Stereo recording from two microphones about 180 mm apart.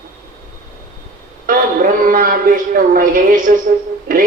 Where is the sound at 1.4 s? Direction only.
50° right (ahead or behind).